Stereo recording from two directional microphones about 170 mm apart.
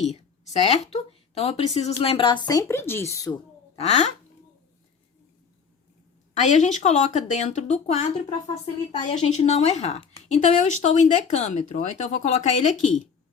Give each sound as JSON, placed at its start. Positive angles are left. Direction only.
{"t": 0.1, "sound": "speech", "side_deg": 40}
{"t": 3.8, "sound": "speech", "side_deg": 40}
{"t": 6.4, "sound": "speech", "side_deg": 45}